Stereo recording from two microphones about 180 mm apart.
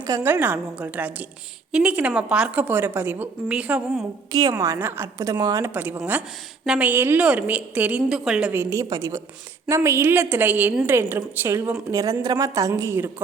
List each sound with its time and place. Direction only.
0.1 s a woman's voice: 10° right (ahead or behind)
4.3 s a woman's voice: 20° right (ahead or behind); by 8.6 s 5° right (ahead or behind)
8.7 s a woman's voice: 20° right (ahead or behind)